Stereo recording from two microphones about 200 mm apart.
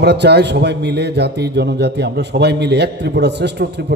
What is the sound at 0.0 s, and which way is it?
A man's voice, 55° right (ahead or behind).